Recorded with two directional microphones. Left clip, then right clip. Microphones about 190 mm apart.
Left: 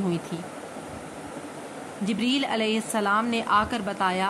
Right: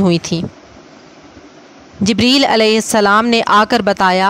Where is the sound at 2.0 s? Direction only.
60° right (ahead or behind).